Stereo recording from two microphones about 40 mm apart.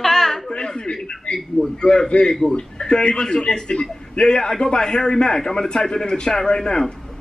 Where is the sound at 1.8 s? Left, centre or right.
Left.